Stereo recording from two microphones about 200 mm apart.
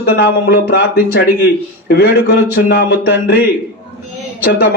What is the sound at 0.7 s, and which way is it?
Speech, 55° left (ahead or behind).